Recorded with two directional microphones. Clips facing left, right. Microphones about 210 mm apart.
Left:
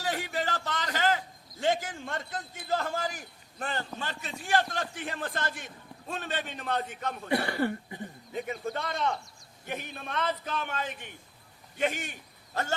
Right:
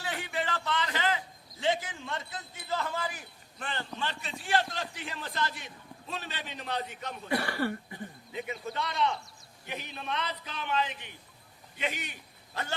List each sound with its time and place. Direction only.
0.0 s a man's voice: 40° left (ahead or behind)
7.3 s speech: 25° left (ahead or behind)
8.3 s a man's voice: 45° left (ahead or behind)